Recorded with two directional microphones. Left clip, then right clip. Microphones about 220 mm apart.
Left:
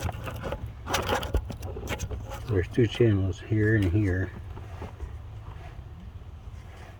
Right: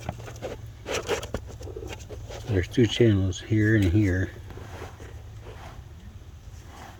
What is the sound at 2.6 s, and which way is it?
Speech, 35° right (ahead or behind).